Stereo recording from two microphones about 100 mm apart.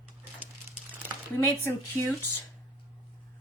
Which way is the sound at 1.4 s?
25° left (ahead or behind).